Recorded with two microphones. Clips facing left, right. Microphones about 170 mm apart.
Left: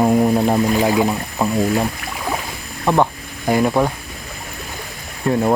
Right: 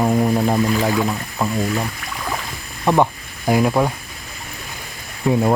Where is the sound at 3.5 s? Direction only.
Centre (ahead or behind).